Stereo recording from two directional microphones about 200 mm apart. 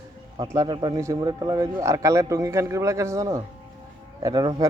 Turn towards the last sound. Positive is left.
turn(degrees=-20)  # may be behind; listen again after turning